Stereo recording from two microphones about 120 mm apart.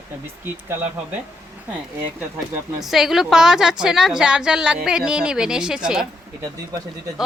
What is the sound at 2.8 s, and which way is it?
A woman's voice, centre (ahead or behind).